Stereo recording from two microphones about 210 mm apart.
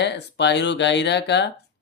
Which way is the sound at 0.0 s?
55° left (ahead or behind).